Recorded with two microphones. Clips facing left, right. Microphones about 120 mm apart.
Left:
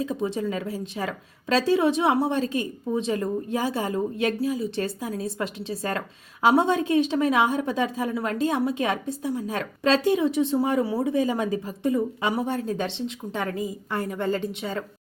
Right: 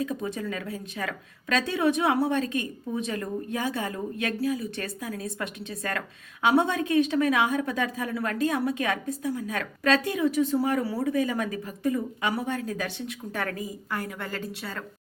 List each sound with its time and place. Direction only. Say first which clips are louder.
0.0 s a woman's voice: left 4 dB; 30° left (ahead or behind)